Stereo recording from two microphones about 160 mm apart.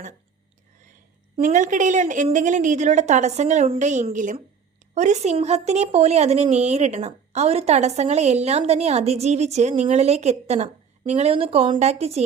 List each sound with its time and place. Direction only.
1.4 s a woman's voice: 55° right (ahead or behind)